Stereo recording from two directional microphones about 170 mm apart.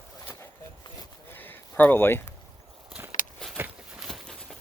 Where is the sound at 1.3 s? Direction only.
10° left (ahead or behind).